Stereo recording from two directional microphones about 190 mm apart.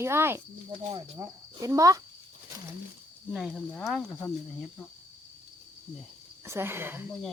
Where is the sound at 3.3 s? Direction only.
5° right (ahead or behind).